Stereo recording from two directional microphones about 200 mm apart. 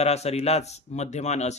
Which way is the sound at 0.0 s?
30° left (ahead or behind).